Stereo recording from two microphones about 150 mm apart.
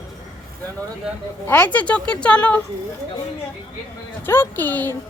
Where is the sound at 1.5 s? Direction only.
10° left (ahead or behind).